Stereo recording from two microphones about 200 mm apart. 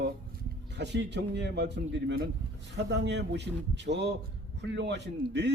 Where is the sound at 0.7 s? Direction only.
60° right (ahead or behind).